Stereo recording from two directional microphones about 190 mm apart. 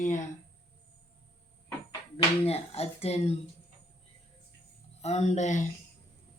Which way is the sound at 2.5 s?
30° left (ahead or behind).